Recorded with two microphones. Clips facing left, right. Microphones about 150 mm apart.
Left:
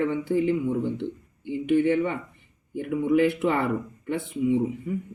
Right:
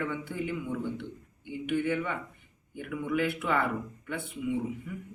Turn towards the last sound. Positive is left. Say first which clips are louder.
# left 8 dB
turn(degrees=30)  # may be behind; listen again after turning